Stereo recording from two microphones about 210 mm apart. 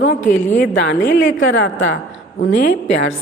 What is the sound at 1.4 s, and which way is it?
Speech, 65° left (ahead or behind).